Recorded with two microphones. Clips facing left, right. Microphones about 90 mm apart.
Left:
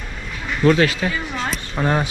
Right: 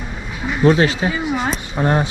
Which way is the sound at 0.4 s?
15° right (ahead or behind).